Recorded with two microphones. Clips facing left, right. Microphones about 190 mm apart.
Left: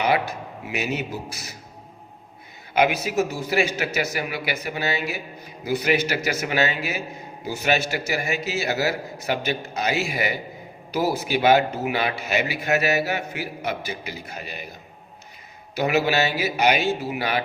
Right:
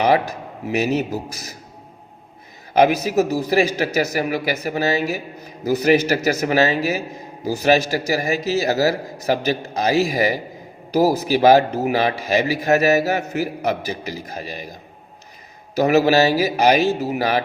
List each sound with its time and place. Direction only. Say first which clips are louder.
0.6 s a man's voice: right 8 dB; 40° right (ahead or behind)
2.7 s a man's voice: right 5 dB; 40° right (ahead or behind)